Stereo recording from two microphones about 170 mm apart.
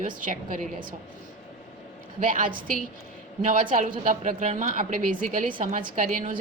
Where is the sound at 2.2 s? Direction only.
55° right (ahead or behind).